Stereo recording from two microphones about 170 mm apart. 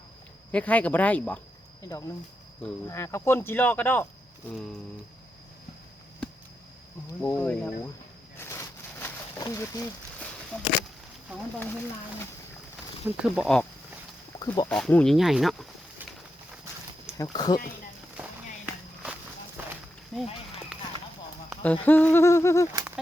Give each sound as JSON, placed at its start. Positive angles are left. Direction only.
{"t": 0.5, "sound": "speech", "side_deg": 10}
{"t": 7.2, "sound": "speech", "side_deg": 10}
{"t": 8.4, "sound": "a sound", "side_deg": 15}
{"t": 10.5, "sound": "speech", "side_deg": 5}
{"t": 13.1, "sound": "speech", "side_deg": -5}
{"t": 14.3, "sound": "speech", "side_deg": 25}
{"t": 14.7, "sound": "speech", "side_deg": 5}
{"t": 17.3, "sound": "speech", "side_deg": 25}
{"t": 18.2, "sound": "walk", "side_deg": -10}
{"t": 20.1, "sound": "speech", "side_deg": 0}
{"t": 21.6, "sound": "speech", "side_deg": 10}